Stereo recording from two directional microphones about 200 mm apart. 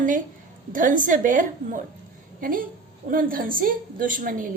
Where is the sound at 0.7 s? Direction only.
40° right (ahead or behind).